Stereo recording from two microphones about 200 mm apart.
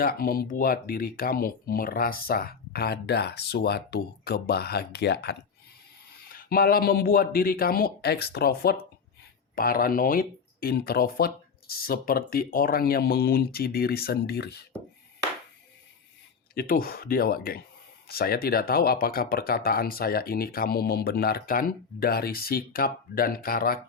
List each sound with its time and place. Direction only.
0.0 s speech: 45° left (ahead or behind)
16.6 s speech: 45° left (ahead or behind)